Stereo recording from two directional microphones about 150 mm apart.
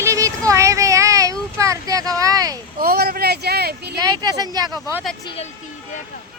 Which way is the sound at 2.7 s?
85° right.